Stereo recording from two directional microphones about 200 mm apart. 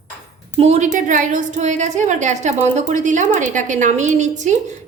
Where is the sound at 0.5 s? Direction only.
30° right (ahead or behind).